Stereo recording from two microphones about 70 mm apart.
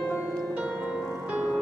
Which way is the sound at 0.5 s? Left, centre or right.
Centre.